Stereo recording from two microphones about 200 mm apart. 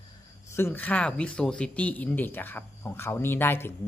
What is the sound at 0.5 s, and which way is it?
Speech, 10° left (ahead or behind).